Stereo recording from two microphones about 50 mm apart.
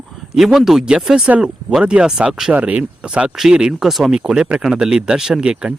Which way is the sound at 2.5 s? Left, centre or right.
Right.